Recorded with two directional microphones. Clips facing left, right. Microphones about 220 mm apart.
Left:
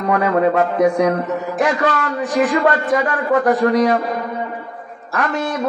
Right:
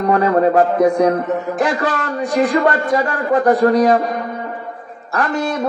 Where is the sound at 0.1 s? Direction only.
35° right (ahead or behind).